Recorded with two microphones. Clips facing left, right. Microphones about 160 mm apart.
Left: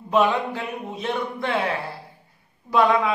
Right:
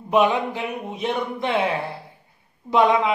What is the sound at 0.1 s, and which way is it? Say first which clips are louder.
A man's voice: right 1 dB; 15° right (ahead or behind).